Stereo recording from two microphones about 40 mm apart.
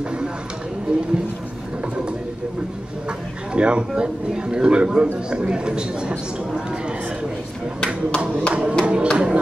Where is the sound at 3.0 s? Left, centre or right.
Right.